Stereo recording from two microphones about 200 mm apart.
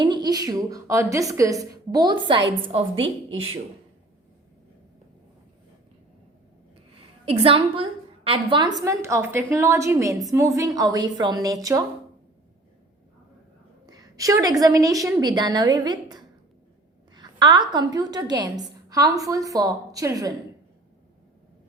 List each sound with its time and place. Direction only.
0.0 s a woman's voice: 20° right (ahead or behind)
2.9 s speech: 70° right (ahead or behind)
7.3 s a woman's voice: 30° right (ahead or behind)
13.8 s a woman's voice: 20° right (ahead or behind)